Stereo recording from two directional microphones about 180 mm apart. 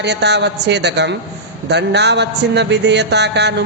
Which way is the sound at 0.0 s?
70° right (ahead or behind).